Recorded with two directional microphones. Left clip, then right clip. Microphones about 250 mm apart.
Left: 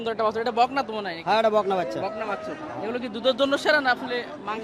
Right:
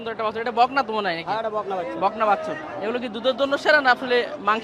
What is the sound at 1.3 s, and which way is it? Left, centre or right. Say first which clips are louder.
Speech: left 4 dB; left.